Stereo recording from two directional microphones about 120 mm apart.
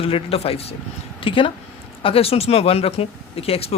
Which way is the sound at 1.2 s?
45° left (ahead or behind).